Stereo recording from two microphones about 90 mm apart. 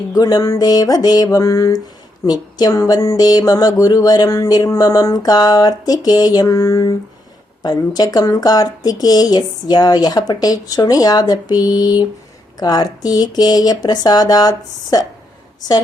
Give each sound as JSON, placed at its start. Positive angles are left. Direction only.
{"t": 0.1, "sound": "speech", "side_deg": 45}